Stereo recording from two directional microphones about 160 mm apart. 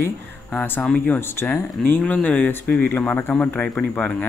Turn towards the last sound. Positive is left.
turn(degrees=10)  # may be behind; listen again after turning